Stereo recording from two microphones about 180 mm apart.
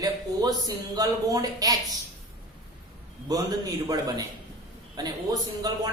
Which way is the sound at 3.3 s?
20° right (ahead or behind).